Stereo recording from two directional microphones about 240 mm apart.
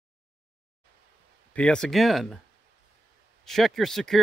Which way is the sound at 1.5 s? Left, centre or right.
Centre.